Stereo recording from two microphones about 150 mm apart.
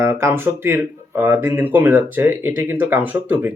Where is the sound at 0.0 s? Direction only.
15° right (ahead or behind).